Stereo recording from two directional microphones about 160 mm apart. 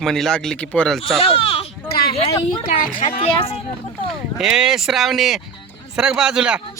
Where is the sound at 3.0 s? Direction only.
35° left (ahead or behind).